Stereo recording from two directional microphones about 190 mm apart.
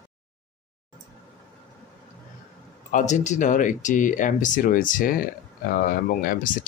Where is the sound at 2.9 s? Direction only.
40° left (ahead or behind).